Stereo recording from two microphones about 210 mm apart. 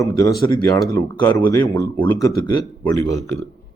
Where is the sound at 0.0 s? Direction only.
15° left (ahead or behind).